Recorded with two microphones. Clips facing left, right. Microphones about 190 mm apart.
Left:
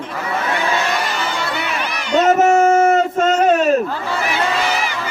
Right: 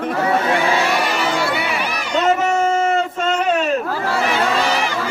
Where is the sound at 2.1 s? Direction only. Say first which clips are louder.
Left 5 dB; 40° left (ahead or behind).